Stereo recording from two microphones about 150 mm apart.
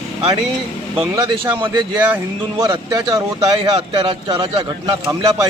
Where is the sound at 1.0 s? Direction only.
35° right (ahead or behind).